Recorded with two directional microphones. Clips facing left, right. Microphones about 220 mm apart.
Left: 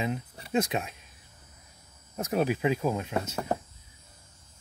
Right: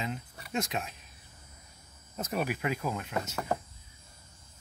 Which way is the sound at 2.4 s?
20° left (ahead or behind).